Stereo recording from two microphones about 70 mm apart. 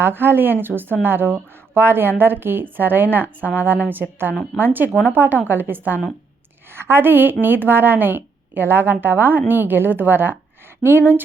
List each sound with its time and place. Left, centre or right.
0.0 s a woman's voice: right